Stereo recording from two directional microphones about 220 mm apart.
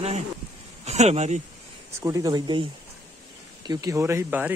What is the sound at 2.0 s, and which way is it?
Speech, 15° right (ahead or behind).